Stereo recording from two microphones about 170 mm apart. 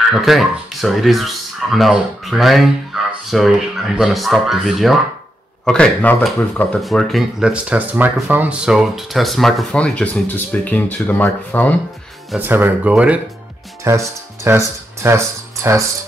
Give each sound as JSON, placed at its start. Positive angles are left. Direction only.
{"t": 0.1, "sound": "speech", "side_deg": 0}
{"t": 12.4, "sound": "speech", "side_deg": -10}